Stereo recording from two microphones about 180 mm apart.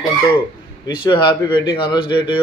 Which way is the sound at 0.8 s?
25° left (ahead or behind).